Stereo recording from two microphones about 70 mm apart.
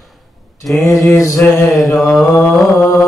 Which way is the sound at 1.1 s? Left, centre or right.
Left.